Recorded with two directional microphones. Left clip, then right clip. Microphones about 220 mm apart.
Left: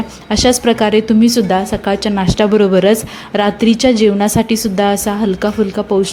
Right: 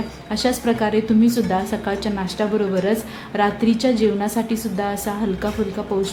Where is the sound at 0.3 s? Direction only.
30° left (ahead or behind).